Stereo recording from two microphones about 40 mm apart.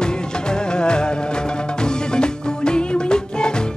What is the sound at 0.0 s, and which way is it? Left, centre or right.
Music, left.